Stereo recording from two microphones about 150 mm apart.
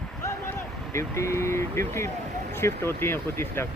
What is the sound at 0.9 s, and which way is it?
Speech, 20° left (ahead or behind).